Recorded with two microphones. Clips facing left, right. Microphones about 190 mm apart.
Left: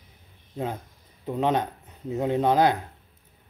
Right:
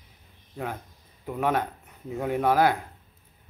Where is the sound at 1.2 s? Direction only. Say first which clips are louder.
Left 2 dB; 20° left (ahead or behind).